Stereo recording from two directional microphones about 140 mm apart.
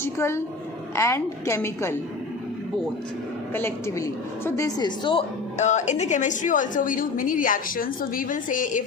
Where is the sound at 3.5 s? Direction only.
20° left (ahead or behind); by 5.2 s 35° left (ahead or behind).